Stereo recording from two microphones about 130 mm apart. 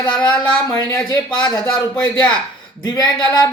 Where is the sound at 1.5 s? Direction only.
5° left (ahead or behind).